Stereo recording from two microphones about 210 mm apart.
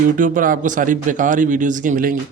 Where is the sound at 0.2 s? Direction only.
40° right (ahead or behind).